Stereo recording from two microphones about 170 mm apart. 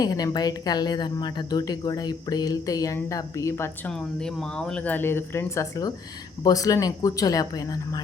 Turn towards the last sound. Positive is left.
turn(degrees=20)  # may be behind; listen again after turning